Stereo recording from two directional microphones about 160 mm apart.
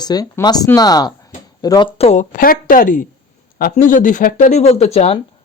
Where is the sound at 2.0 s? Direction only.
45° left (ahead or behind).